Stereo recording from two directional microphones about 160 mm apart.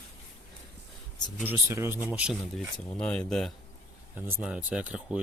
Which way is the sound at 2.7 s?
5° left (ahead or behind).